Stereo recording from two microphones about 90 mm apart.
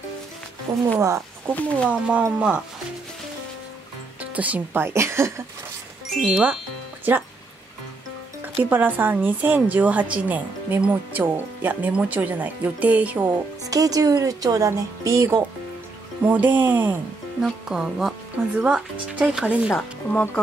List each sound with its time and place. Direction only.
0.9 s speech: 35° right (ahead or behind)
1.5 s speech: 15° left (ahead or behind)
1.9 s speech: 15° right (ahead or behind)
4.2 s speech: 15° right (ahead or behind)
7.1 s speech: 20° right (ahead or behind)
8.6 s speech: 20° right (ahead or behind)
13.7 s speech: 40° right (ahead or behind)
16.3 s speech: 20° right (ahead or behind)
17.4 s speech: 5° right (ahead or behind)